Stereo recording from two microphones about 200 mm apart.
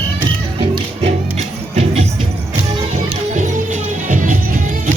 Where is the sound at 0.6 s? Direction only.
30° right (ahead or behind).